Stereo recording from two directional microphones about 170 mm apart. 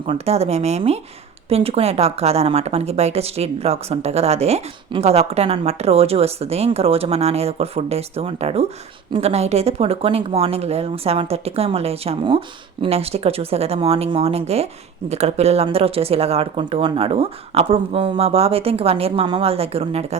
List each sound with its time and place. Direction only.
0.1 s a woman's voice: 40° right (ahead or behind)